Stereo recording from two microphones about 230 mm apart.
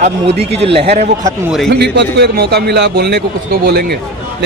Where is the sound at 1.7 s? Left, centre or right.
Right.